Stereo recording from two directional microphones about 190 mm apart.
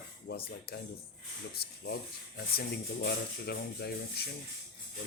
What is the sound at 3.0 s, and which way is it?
Speech, 60° left (ahead or behind).